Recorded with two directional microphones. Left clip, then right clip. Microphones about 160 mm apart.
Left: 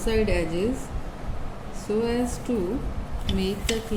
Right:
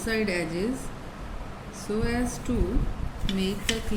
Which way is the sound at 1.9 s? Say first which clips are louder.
Left 4 dB; 15° right (ahead or behind).